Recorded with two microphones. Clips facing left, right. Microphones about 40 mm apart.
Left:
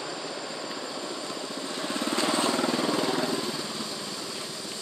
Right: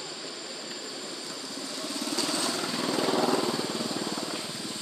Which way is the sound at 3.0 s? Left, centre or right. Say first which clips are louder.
Right 1 dB; centre.